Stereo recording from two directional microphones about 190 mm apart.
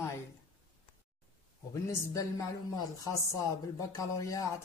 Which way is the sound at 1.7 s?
15° left (ahead or behind).